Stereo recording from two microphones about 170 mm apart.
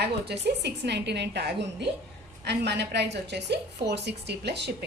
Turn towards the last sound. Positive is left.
turn(degrees=-80)